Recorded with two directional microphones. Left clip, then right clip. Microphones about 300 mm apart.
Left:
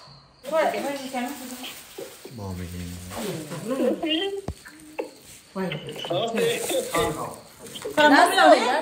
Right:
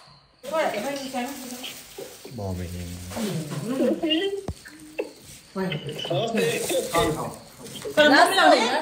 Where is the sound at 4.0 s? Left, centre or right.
Left.